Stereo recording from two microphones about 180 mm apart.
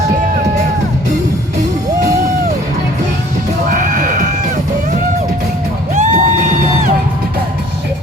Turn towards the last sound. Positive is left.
turn(degrees=-40)  # may be behind; listen again after turning